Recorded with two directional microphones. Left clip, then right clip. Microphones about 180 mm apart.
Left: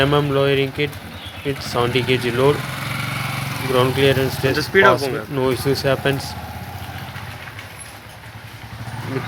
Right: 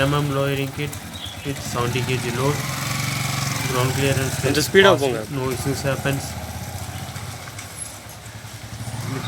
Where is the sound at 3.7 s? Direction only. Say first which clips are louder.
Left 7 dB; 25° left (ahead or behind).